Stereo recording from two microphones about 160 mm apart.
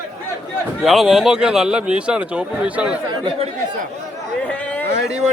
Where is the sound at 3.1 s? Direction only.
35° right (ahead or behind).